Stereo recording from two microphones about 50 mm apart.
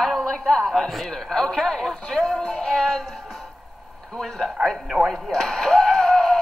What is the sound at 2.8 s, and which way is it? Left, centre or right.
Speech, centre.